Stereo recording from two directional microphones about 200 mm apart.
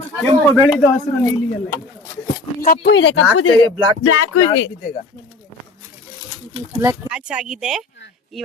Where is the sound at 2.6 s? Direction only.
50° left (ahead or behind); by 4.4 s 90° left.